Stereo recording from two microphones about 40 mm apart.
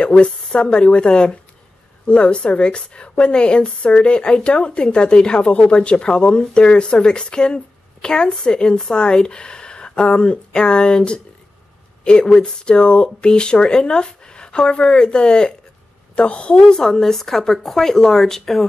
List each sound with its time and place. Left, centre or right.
0.0 s a woman's voice: left